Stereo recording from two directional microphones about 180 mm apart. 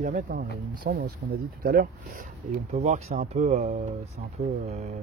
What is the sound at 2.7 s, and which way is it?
Speech, 35° right (ahead or behind).